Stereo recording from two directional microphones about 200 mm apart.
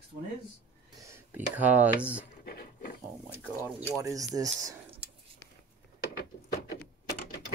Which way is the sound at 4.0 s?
15° right (ahead or behind).